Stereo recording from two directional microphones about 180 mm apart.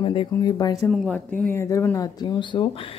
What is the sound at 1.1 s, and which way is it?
Speech, 10° left (ahead or behind).